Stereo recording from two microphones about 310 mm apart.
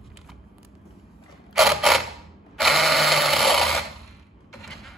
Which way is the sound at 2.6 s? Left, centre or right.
Centre.